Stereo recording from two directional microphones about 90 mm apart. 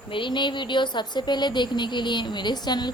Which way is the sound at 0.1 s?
65° left (ahead or behind).